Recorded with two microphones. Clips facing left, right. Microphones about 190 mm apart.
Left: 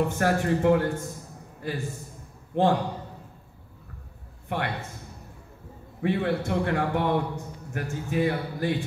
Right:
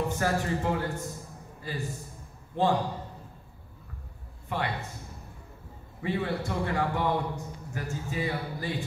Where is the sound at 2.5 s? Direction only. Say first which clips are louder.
Left 4 dB; 70° left (ahead or behind).